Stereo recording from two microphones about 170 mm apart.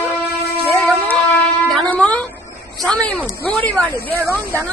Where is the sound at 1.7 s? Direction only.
10° left (ahead or behind).